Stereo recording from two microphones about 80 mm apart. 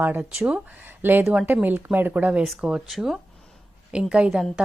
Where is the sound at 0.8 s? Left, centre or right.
Right.